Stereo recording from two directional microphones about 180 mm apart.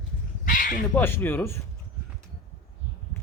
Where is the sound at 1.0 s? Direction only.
10° left (ahead or behind).